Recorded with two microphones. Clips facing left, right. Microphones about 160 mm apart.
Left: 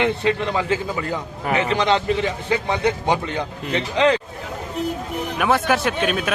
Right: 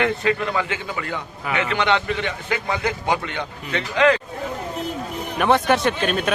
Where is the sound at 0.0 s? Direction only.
25° left (ahead or behind).